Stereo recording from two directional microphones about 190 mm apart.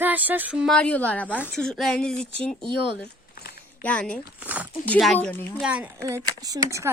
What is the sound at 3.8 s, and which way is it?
Speech, 5° left (ahead or behind).